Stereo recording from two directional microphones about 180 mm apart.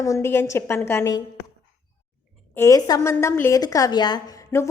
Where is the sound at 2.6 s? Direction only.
20° left (ahead or behind).